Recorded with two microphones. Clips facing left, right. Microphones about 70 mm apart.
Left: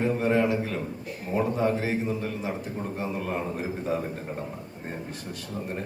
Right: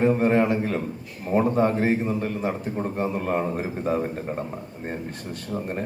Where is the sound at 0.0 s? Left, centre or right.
Right.